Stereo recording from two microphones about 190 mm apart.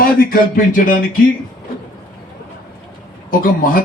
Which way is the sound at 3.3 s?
45° left (ahead or behind).